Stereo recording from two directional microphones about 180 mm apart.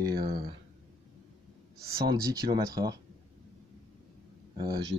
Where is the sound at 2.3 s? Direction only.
20° right (ahead or behind).